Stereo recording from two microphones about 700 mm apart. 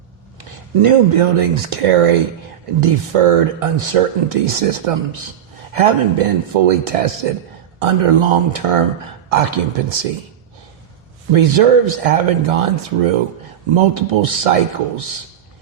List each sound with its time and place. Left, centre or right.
0.3 s speech: right
11.3 s speech: right